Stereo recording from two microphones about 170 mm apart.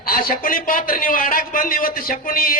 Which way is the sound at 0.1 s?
55° left (ahead or behind).